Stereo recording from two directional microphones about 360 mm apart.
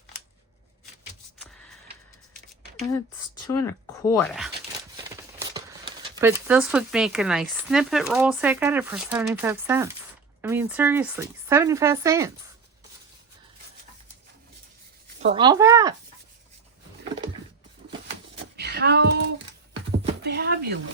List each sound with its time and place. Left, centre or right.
3.5 s speech: centre
5.4 s speech: centre
15.2 s speech: centre
18.5 s a sound: right
20.2 s speech: right